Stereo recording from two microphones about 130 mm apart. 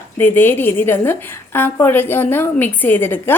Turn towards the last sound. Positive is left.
turn(degrees=15)  # may be behind; listen again after turning